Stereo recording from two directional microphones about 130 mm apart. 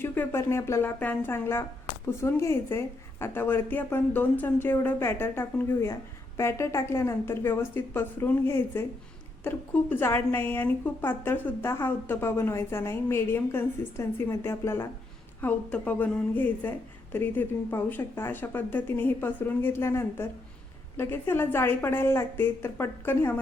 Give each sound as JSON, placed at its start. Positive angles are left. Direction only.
{"t": 0.0, "sound": "a woman's voice", "side_deg": 15}